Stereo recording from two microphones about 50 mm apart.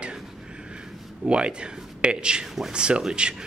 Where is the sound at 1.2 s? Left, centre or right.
Right.